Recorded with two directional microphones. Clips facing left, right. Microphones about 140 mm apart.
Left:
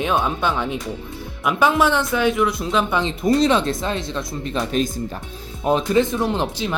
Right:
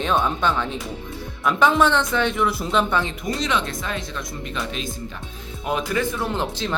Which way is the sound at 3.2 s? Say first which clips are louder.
Left 8 dB; 35° left (ahead or behind).